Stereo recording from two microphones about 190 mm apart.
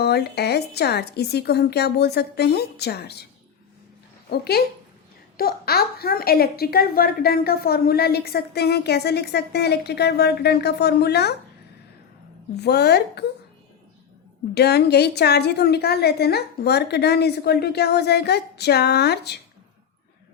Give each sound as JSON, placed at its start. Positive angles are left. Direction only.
{"t": 0.0, "sound": "a woman's voice", "side_deg": 60}
{"t": 4.3, "sound": "a woman's voice", "side_deg": 55}
{"t": 12.5, "sound": "a woman's voice", "side_deg": 60}
{"t": 14.5, "sound": "a woman's voice", "side_deg": 60}